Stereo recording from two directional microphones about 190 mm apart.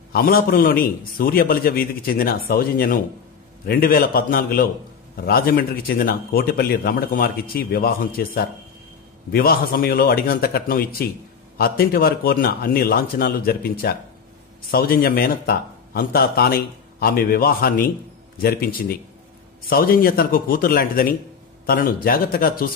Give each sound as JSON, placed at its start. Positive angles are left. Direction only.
{"t": 0.1, "sound": "a man's voice", "side_deg": 50}